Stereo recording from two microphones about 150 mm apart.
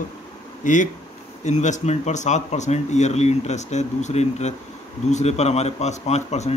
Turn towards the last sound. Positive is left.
turn(degrees=50)  # may be behind; listen again after turning